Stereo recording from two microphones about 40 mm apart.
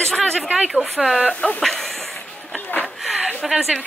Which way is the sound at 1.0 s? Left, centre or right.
Centre.